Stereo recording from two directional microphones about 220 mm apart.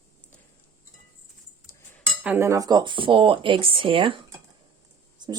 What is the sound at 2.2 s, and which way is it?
Speech, 10° right (ahead or behind).